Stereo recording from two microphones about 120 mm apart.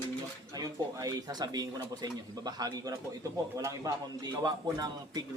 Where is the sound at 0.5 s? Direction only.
30° right (ahead or behind).